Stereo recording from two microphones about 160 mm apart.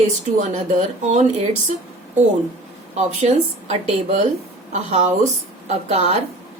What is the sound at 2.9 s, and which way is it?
Speech, 45° right (ahead or behind).